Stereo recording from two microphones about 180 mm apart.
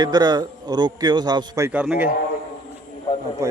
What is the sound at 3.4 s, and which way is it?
Speech, 15° right (ahead or behind).